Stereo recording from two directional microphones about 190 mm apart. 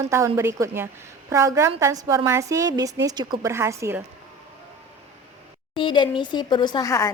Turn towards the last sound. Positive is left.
turn(degrees=15)  # may be behind; listen again after turning